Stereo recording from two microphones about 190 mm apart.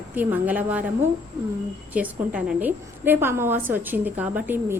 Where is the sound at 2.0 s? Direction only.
5° right (ahead or behind).